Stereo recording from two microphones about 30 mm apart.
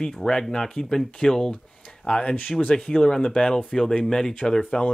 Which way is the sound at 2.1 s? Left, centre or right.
Left.